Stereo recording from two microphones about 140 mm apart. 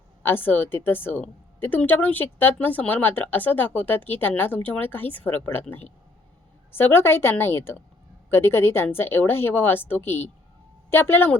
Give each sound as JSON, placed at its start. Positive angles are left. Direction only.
{"t": 0.2, "sound": "a woman's voice", "side_deg": 15}